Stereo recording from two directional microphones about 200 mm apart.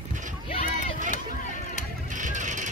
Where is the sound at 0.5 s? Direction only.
30° left (ahead or behind).